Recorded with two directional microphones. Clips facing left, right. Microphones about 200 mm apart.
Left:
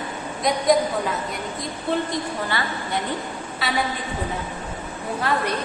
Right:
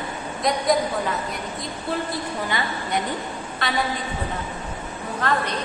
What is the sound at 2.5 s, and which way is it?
Speech, 15° right (ahead or behind).